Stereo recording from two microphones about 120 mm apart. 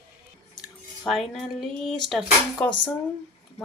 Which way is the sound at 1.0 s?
5° left (ahead or behind).